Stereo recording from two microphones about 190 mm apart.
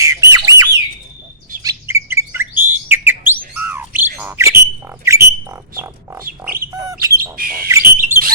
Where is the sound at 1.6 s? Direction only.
15° right (ahead or behind).